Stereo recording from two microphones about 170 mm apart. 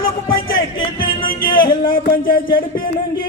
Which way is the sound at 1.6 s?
60° left (ahead or behind).